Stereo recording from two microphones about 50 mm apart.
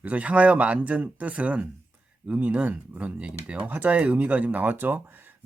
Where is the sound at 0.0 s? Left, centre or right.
Right.